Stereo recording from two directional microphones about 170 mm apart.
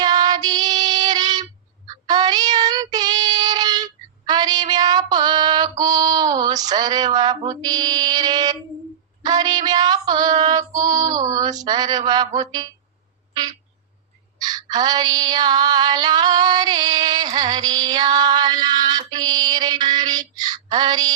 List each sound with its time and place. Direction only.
0.0 s female singing: 25° right (ahead or behind)
2.0 s child singing: 25° right (ahead or behind)
14.4 s female singing: 20° right (ahead or behind)
20.7 s bird: 25° right (ahead or behind)